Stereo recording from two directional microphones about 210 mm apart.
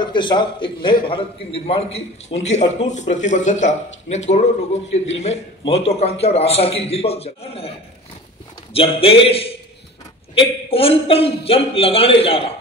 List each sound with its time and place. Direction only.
0.0 s a man's voice: 20° left (ahead or behind)
8.7 s a man's voice: 25° left (ahead or behind)